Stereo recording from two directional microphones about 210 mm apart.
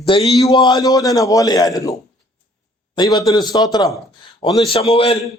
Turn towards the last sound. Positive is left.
turn(degrees=30)  # may be behind; listen again after turning